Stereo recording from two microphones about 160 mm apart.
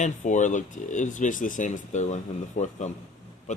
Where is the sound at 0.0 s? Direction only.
50° left (ahead or behind).